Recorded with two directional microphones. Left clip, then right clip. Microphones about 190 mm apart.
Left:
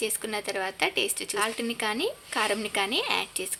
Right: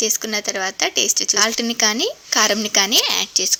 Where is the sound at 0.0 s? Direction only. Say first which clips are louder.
Right 9 dB; 25° right (ahead or behind).